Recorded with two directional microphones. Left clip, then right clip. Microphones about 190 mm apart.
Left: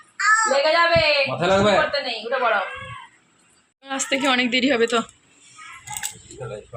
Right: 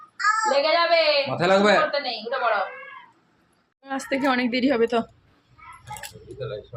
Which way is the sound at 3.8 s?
10° right (ahead or behind).